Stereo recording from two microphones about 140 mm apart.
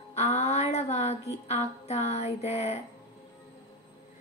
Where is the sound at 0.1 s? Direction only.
50° left (ahead or behind).